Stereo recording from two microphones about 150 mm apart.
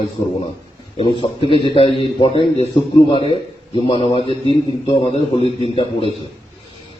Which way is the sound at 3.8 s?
35° left (ahead or behind).